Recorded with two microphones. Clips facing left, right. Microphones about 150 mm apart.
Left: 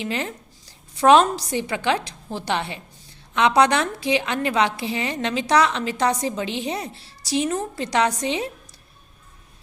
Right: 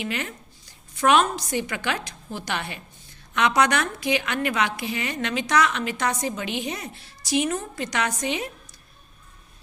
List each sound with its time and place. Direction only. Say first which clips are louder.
0.0 s a woman's voice: left 3 dB; 30° left (ahead or behind)